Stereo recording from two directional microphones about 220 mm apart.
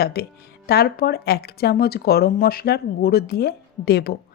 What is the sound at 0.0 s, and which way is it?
A woman's voice, 45° left (ahead or behind).